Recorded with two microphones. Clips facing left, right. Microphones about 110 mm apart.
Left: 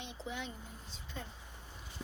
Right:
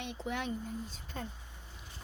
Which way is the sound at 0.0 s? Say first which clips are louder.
Right 5 dB; 60° right (ahead or behind).